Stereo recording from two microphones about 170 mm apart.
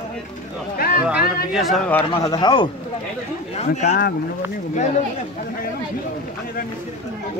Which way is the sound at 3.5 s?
40° left (ahead or behind).